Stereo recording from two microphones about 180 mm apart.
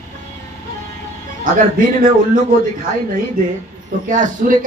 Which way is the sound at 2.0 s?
50° right (ahead or behind).